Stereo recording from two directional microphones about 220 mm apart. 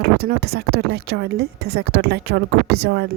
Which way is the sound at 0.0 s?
45° right (ahead or behind).